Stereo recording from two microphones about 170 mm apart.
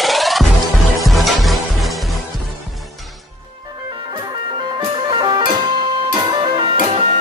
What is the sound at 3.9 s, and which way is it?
Music, 30° right (ahead or behind).